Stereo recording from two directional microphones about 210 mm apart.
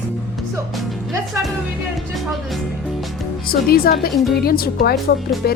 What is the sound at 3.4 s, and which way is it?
Speech, 45° left (ahead or behind).